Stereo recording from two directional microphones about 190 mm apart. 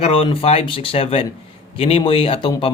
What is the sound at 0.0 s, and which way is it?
A man's voice, 30° left (ahead or behind).